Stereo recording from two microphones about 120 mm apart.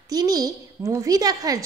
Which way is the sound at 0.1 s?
30° right (ahead or behind).